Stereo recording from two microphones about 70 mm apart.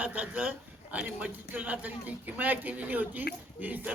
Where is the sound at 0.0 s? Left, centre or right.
Right.